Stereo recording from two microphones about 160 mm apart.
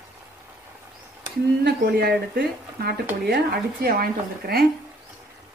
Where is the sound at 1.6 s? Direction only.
75° right (ahead or behind).